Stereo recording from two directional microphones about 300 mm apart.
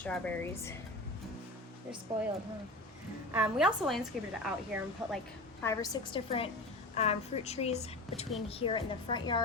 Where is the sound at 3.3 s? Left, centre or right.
Centre.